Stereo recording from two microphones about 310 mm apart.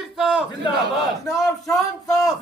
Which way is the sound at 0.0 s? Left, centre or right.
Centre.